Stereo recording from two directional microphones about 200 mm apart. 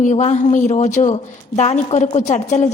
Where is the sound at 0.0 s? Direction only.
35° left (ahead or behind).